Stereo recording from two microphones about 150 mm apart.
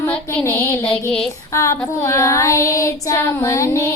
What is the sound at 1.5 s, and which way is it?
Child singing, 20° left (ahead or behind).